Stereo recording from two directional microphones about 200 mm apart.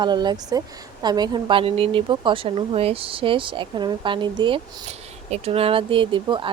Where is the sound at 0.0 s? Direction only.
20° right (ahead or behind).